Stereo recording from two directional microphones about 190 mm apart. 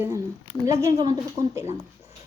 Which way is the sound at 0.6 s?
15° right (ahead or behind).